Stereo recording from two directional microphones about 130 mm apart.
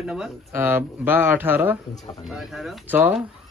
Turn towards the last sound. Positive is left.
turn(degrees=-15)  # may be behind; listen again after turning